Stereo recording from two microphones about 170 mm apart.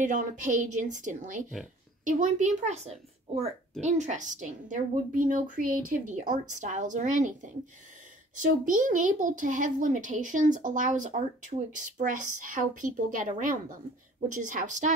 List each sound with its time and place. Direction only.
0.0 s a woman's voice: 50° right (ahead or behind)